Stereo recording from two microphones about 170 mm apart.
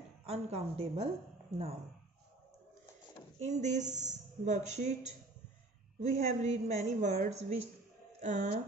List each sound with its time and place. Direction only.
0.2 s a woman's voice: 35° right (ahead or behind)
3.3 s speech: 45° right (ahead or behind)